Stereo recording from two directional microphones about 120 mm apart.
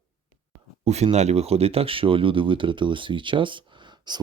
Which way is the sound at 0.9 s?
65° right (ahead or behind).